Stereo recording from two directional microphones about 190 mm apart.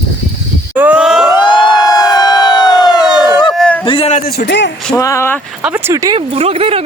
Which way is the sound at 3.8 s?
30° left (ahead or behind).